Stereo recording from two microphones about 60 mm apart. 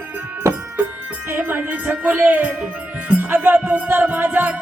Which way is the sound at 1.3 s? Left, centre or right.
Right.